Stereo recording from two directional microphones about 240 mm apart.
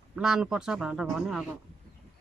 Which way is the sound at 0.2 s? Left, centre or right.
Centre.